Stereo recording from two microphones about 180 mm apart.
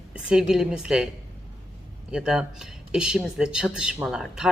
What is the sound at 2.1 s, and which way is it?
Speech, 5° right (ahead or behind).